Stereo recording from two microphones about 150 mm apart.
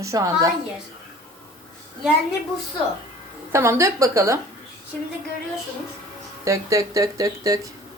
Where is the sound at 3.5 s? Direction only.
20° right (ahead or behind).